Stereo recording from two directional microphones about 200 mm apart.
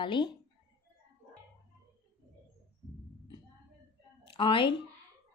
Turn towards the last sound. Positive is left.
turn(degrees=25)  # may be behind; listen again after turning